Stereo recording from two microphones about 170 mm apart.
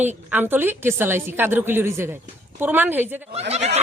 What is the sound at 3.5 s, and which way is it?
Speech, 40° right (ahead or behind).